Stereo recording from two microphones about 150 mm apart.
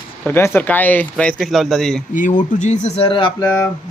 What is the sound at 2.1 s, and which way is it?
Speech, 60° left (ahead or behind).